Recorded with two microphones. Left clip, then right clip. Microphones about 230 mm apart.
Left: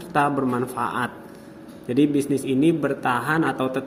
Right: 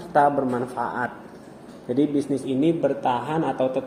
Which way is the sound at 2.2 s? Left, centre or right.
Left.